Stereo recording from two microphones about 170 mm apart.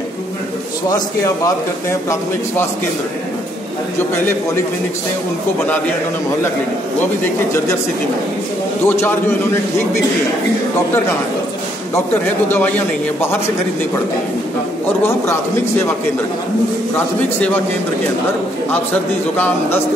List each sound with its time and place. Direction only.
0.8 s a man's voice: 20° left (ahead or behind)
8.8 s a man's voice: 10° left (ahead or behind)
16.9 s a man's voice: 10° left (ahead or behind)
19.3 s a man's voice: 10° left (ahead or behind)